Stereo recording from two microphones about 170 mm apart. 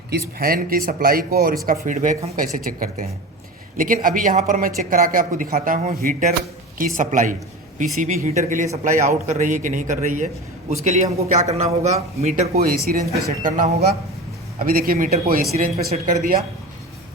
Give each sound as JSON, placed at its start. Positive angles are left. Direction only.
{"t": 0.1, "sound": "a man's voice", "side_deg": -60}
{"t": 12.5, "sound": "speech", "side_deg": -65}